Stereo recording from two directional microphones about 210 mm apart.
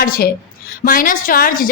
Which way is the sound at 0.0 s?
45° left (ahead or behind).